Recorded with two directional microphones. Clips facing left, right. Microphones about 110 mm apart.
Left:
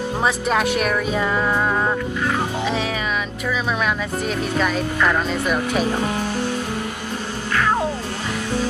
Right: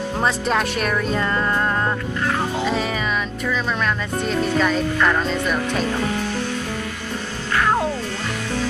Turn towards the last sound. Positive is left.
turn(degrees=0)  # may be behind; listen again after turning